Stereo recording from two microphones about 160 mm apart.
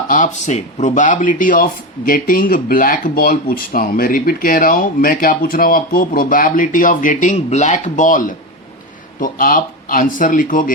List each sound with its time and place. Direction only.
0.1 s speech: 50° left (ahead or behind)